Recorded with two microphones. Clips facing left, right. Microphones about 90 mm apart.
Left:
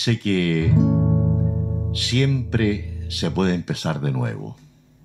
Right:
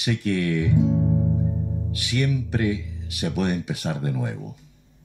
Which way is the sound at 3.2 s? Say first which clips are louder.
Left 3 dB; 85° left.